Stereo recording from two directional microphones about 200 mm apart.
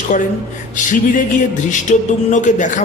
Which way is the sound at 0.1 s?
40° left (ahead or behind).